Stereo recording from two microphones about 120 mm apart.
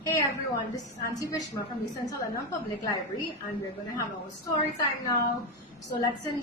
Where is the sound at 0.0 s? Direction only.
25° left (ahead or behind).